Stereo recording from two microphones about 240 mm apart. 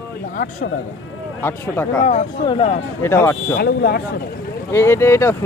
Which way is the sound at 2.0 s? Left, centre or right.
Left.